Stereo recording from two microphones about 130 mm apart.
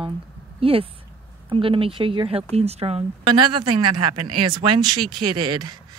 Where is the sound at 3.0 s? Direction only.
35° right (ahead or behind).